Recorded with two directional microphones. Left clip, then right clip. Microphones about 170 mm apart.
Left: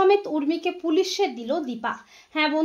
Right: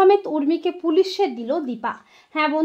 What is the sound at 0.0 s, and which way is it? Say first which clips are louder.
Speech: right 4 dB; 40° right (ahead or behind).